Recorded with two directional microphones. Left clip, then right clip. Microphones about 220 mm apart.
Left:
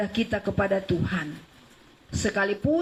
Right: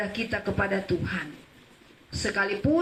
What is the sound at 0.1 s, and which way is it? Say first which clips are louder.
Speech: left 2 dB; 30° left (ahead or behind).